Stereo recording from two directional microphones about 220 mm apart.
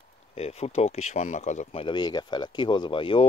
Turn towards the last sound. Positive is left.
turn(degrees=25)  # may be behind; listen again after turning